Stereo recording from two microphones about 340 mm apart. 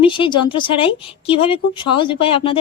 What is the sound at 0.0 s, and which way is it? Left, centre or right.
Speech, centre.